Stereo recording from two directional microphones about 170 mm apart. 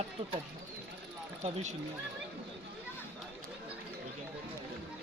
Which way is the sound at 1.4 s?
40° right (ahead or behind).